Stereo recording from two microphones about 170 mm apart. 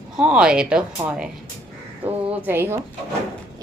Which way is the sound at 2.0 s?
10° right (ahead or behind).